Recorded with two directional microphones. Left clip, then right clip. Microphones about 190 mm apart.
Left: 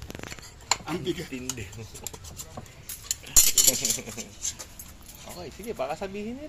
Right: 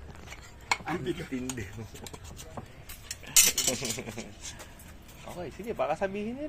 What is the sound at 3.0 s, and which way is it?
Cutlery, centre (ahead or behind).